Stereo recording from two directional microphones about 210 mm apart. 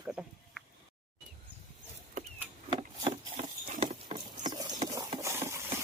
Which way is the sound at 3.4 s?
35° right (ahead or behind).